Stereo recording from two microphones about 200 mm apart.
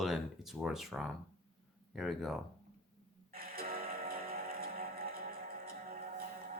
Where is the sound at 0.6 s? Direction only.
Centre (ahead or behind).